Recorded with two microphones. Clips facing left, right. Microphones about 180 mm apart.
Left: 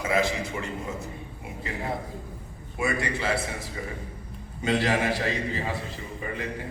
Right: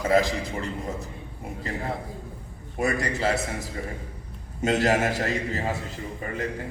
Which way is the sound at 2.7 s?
40° right (ahead or behind).